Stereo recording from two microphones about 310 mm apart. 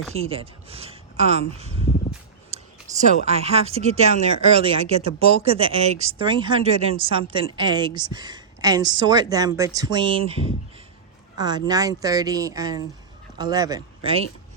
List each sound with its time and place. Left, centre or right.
0.1 s speech: centre
2.5 s a sound: right
3.2 s a woman's voice: centre
11.3 s a woman's voice: centre